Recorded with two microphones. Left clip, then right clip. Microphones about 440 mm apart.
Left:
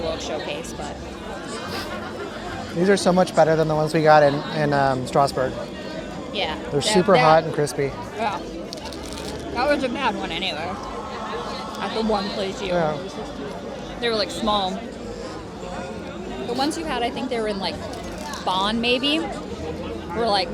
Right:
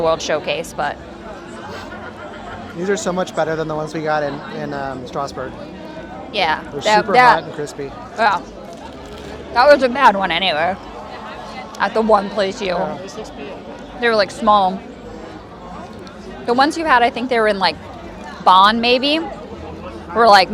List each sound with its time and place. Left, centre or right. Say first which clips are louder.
0.2 s a woman's voice: right 8 dB; right
2.8 s speech: left 2 dB; left
6.3 s speech: right 6 dB; right
9.6 s a woman's voice: right 11 dB; right
11.8 s a woman's voice: right 10 dB; right
14.0 s speech: right 8 dB; right
16.6 s a woman's voice: right 12 dB; right
18.4 s speech: right 11 dB; right
20.1 s a woman's voice: right 12 dB; right